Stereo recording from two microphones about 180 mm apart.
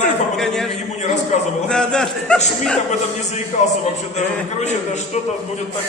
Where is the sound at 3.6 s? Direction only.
40° left (ahead or behind).